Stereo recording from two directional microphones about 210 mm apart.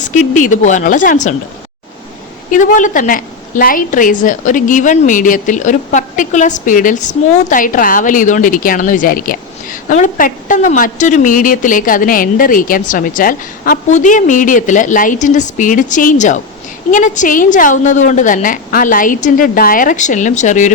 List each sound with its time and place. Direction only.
0.0 s a woman's voice: 40° left (ahead or behind)
2.5 s a woman's voice: 40° left (ahead or behind)